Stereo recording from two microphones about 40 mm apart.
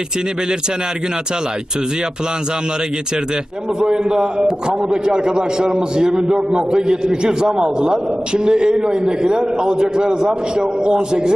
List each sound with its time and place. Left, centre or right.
3.8 s a man's voice: right